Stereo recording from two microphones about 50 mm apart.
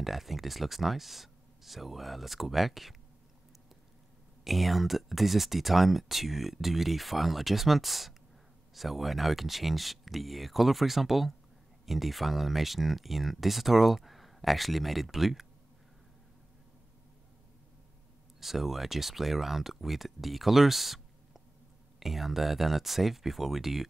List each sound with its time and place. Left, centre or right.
0.0 s speech: centre
4.5 s speech: centre
18.4 s speech: centre